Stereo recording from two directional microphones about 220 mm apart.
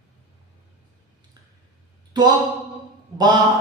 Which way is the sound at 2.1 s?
20° right (ahead or behind).